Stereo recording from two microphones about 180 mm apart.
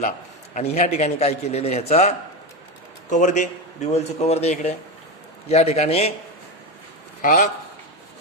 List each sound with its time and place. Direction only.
0.5 s a man's voice: 35° left (ahead or behind)
7.2 s a man's voice: 50° left (ahead or behind)